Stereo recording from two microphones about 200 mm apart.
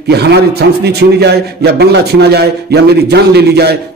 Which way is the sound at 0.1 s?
55° right (ahead or behind).